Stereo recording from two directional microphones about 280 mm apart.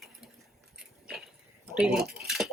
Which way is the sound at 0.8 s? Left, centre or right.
Centre.